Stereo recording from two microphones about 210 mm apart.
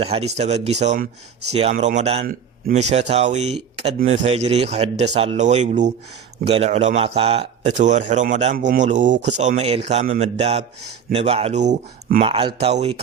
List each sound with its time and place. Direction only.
0.0 s speech: 30° right (ahead or behind)
12.2 s speech: 25° right (ahead or behind)